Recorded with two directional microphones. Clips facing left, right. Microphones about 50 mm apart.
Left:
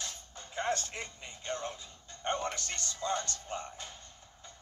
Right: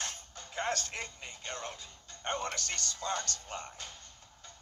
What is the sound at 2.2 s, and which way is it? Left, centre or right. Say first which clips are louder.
Music: left 2 dB; right.